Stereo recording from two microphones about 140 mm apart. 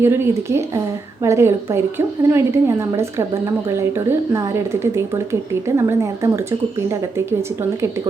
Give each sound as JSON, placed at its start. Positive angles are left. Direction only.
{"t": 0.0, "sound": "a woman's voice", "side_deg": -20}